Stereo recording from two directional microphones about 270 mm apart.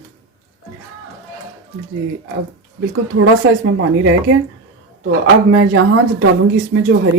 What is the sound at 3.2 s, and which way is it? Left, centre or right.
Speech, right.